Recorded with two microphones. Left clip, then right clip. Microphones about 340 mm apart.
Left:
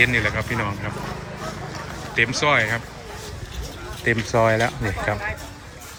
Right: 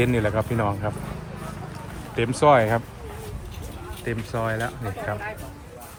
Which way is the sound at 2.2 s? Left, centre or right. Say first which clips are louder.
Right 1 dB; centre.